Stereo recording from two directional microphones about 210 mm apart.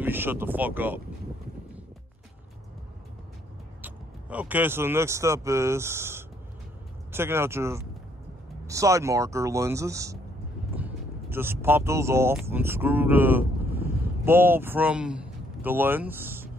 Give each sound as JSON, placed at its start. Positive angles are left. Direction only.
{"t": 0.0, "sound": "speech", "side_deg": -10}
{"t": 3.8, "sound": "a man's voice", "side_deg": -10}